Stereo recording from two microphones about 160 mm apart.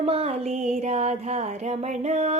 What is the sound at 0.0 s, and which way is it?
Speech, 40° right (ahead or behind).